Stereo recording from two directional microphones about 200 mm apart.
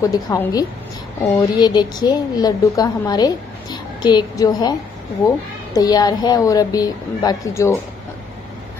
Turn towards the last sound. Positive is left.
turn(degrees=15)  # may be behind; listen again after turning